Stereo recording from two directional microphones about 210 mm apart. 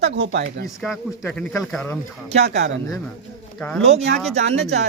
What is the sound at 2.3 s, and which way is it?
Speech, 30° right (ahead or behind).